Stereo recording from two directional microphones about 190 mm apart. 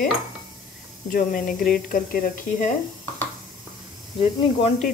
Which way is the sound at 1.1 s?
45° left (ahead or behind).